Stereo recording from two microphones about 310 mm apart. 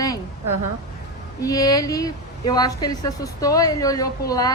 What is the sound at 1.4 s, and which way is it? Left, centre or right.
A woman's voice, centre.